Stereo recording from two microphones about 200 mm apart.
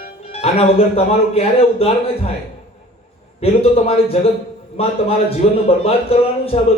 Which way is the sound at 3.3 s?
30° left (ahead or behind).